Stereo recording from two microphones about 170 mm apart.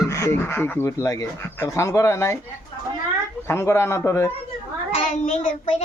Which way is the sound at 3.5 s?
15° left (ahead or behind).